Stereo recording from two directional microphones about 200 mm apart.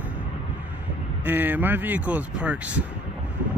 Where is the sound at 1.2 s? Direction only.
10° right (ahead or behind).